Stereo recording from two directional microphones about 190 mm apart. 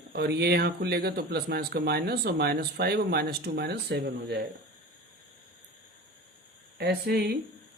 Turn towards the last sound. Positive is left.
turn(degrees=-60)  # may be behind; listen again after turning